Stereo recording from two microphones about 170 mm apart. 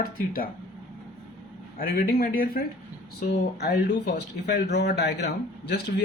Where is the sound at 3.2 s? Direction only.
75° left (ahead or behind).